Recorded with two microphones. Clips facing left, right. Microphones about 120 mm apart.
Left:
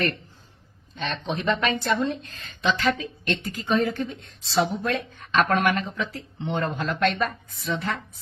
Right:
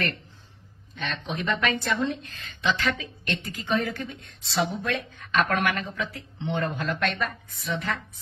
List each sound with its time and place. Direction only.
0.9 s a woman's voice: 35° left (ahead or behind)